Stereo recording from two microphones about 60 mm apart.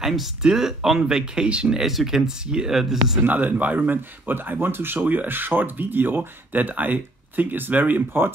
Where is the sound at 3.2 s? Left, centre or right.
Right.